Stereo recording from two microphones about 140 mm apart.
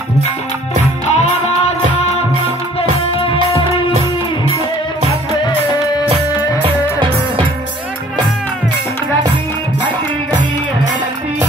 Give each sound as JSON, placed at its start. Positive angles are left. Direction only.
{"t": 1.0, "sound": "music", "side_deg": 50}
{"t": 3.2, "sound": "music", "side_deg": 40}
{"t": 6.6, "sound": "music", "side_deg": -40}